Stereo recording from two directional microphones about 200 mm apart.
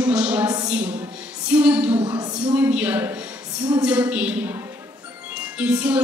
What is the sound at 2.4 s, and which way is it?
A woman's voice, 5° right (ahead or behind).